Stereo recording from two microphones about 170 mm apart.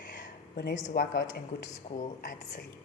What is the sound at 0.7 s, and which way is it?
Speech, 55° left (ahead or behind).